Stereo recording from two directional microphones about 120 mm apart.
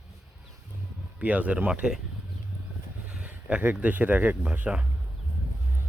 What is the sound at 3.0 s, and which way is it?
Speech, 10° right (ahead or behind).